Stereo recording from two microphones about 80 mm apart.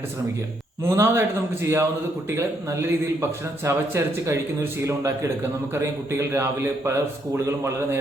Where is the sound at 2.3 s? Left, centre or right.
Right.